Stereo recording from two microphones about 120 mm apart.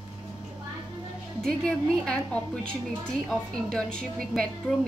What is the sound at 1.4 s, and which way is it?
A woman's voice, 5° left (ahead or behind).